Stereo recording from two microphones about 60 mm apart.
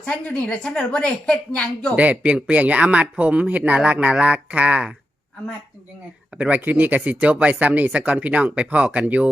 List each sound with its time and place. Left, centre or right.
0.0 s a woman's voice: left
2.0 s speech: right
6.3 s speech: right